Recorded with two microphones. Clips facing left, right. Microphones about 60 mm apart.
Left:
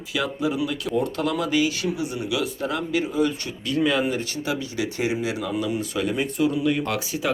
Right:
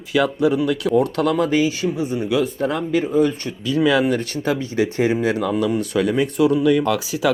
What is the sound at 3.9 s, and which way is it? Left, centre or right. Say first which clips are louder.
Speech: right 6 dB; right.